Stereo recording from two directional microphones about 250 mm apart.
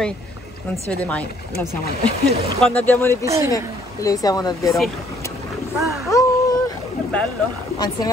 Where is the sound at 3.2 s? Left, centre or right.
Centre.